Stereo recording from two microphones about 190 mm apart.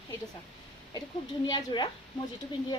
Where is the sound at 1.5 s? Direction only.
25° left (ahead or behind).